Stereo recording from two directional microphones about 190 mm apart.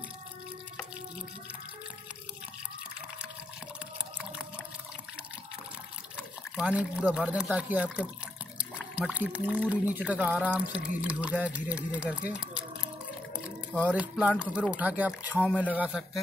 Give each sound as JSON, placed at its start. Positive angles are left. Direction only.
{"t": 6.5, "sound": "speech", "side_deg": -5}
{"t": 8.5, "sound": "water", "side_deg": -5}
{"t": 9.7, "sound": "speech", "side_deg": -10}
{"t": 13.9, "sound": "speech", "side_deg": -5}